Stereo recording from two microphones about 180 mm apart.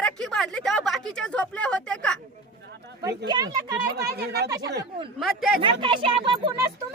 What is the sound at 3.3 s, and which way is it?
Speech, 20° right (ahead or behind).